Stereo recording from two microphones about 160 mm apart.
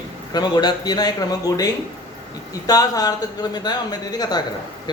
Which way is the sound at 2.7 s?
25° left (ahead or behind).